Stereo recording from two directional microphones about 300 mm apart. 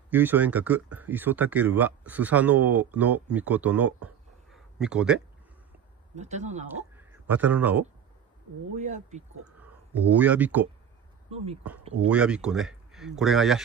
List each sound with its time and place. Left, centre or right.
0.1 s speech: centre
6.1 s speech: right
6.7 s speech: centre
8.7 s speech: right
9.6 s speech: centre
11.2 s speech: centre
12.1 s speech: centre